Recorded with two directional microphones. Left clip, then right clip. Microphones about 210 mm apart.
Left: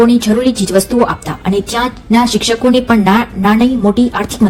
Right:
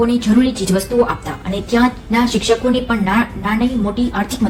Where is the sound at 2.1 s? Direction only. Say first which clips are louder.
Left 3 dB; 45° left (ahead or behind).